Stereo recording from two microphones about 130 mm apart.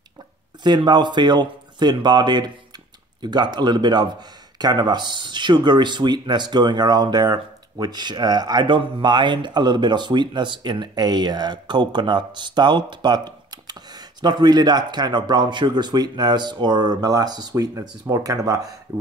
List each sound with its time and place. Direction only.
0.7 s speech: 35° right (ahead or behind)